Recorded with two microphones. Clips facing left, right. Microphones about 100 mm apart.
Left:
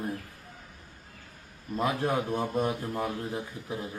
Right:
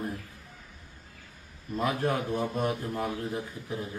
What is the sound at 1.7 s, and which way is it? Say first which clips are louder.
Speech: even; 20° left (ahead or behind).